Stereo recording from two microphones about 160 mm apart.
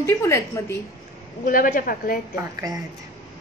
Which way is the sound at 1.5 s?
60° left (ahead or behind).